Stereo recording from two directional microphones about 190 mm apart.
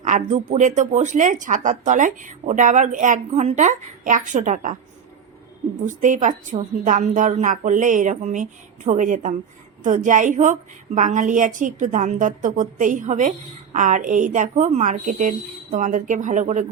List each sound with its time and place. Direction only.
0.0 s speech: 45° right (ahead or behind)
5.8 s a woman's voice: 40° right (ahead or behind)